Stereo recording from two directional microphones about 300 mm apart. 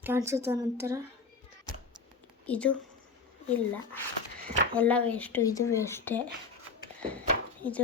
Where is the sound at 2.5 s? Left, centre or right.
Centre.